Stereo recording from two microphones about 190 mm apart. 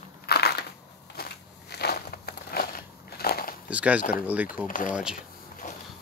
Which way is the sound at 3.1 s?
55° left (ahead or behind).